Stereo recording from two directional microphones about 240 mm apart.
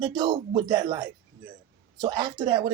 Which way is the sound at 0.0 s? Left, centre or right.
Centre.